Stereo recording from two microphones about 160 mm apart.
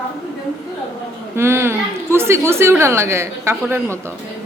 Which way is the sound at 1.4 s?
15° right (ahead or behind).